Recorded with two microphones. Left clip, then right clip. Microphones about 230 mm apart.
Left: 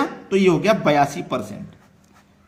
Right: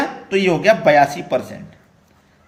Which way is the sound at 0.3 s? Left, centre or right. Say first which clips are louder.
Right 3 dB; left.